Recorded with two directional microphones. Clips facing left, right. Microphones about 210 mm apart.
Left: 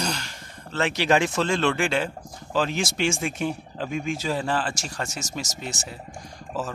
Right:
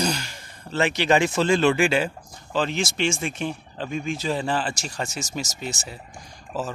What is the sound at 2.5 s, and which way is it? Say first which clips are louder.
Speech: even; 5° left (ahead or behind).